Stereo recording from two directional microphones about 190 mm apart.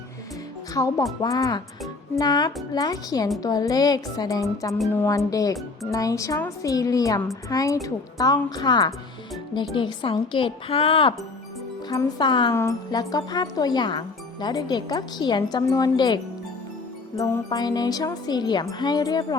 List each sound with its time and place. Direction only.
0.7 s a woman's voice: 20° left (ahead or behind)
11.9 s speech: 20° left (ahead or behind)